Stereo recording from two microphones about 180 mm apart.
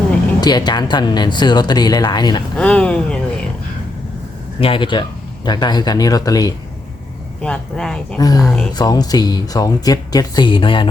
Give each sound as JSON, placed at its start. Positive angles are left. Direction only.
{"t": 0.4, "sound": "speech", "side_deg": 25}
{"t": 2.6, "sound": "speech", "side_deg": 5}
{"t": 4.6, "sound": "speech", "side_deg": 30}
{"t": 7.4, "sound": "speech", "side_deg": 5}
{"t": 8.2, "sound": "speech", "side_deg": 20}